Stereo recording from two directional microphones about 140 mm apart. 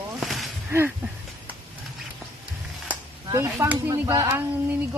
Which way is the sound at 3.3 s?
20° right (ahead or behind).